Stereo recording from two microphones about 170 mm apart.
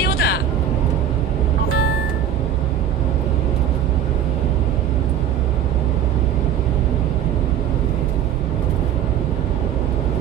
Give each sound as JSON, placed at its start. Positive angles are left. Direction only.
{"t": 0.0, "sound": "vehicle", "side_deg": 70}